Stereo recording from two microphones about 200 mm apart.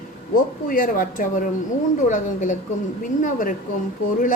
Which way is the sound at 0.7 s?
45° left (ahead or behind).